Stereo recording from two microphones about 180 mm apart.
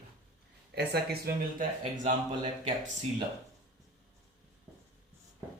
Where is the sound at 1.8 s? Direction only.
45° right (ahead or behind).